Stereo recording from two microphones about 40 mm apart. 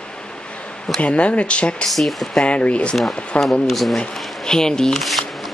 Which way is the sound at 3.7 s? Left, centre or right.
Centre.